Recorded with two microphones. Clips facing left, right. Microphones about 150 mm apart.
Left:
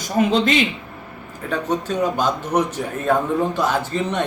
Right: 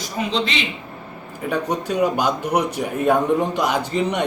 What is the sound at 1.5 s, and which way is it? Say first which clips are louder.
A man's voice: even; 10° right (ahead or behind).